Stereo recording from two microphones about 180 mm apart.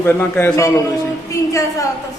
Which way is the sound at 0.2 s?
10° left (ahead or behind).